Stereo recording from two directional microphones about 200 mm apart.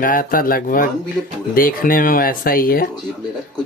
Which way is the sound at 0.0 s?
45° left (ahead or behind).